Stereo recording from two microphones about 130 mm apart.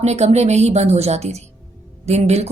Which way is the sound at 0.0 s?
55° right (ahead or behind).